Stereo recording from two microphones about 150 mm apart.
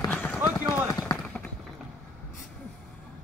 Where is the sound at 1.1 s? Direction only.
5° left (ahead or behind).